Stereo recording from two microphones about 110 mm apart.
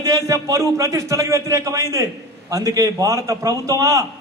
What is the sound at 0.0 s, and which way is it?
A man's voice, 30° right (ahead or behind).